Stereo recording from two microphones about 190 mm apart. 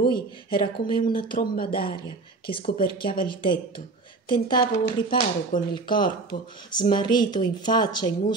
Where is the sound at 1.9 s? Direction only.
25° left (ahead or behind).